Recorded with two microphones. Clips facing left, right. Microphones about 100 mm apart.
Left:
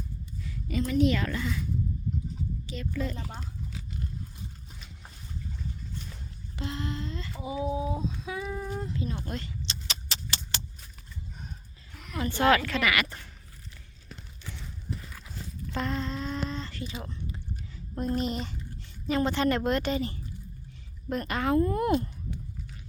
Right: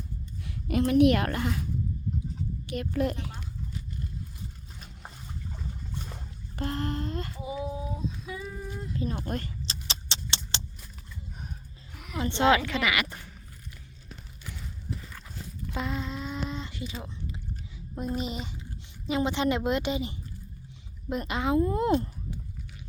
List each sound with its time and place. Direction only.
0.4 s a woman's voice: 60° right (ahead or behind)
2.6 s a child's voice: 60° right (ahead or behind)
3.2 s speech: 40° left (ahead or behind)
6.6 s speech: 50° right (ahead or behind)
8.3 s a sound: 90° left
8.6 s speech: 35° left (ahead or behind)
9.0 s speech: 40° right (ahead or behind)
9.8 s a sound: 30° right (ahead or behind)
11.9 s a sound: 10° right (ahead or behind)
12.2 s a woman's voice: 20° right (ahead or behind)
15.7 s a sound: 10° right (ahead or behind)
17.9 s speech: 5° right (ahead or behind)
19.0 s a woman's voice: 15° right (ahead or behind)